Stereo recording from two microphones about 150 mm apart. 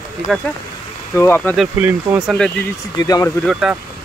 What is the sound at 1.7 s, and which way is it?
Speech, 10° right (ahead or behind).